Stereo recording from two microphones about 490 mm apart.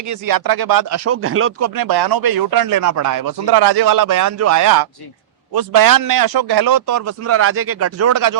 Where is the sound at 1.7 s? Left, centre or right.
Right.